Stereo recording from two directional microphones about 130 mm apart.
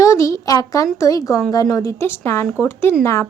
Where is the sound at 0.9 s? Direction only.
25° left (ahead or behind).